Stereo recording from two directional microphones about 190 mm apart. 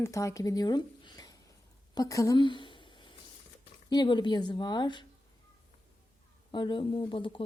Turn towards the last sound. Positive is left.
turn(degrees=25)  # may be behind; listen again after turning